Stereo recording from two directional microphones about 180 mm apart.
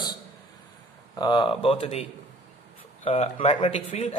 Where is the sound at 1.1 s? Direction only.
25° left (ahead or behind).